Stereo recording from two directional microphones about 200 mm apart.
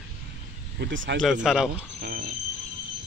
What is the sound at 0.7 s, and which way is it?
Speech, 65° right (ahead or behind).